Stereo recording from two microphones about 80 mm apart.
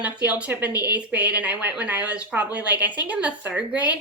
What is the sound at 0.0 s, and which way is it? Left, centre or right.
A woman's voice, centre.